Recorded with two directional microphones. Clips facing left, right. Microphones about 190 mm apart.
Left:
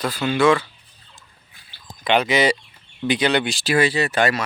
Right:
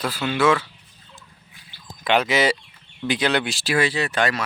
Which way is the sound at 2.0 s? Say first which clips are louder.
Left 1 dB; centre (ahead or behind).